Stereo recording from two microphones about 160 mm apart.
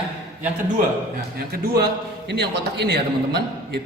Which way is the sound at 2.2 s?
90° right.